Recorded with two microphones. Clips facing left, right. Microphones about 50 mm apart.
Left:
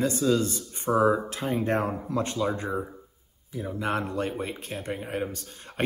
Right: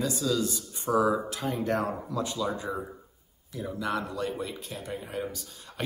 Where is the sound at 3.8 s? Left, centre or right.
Left.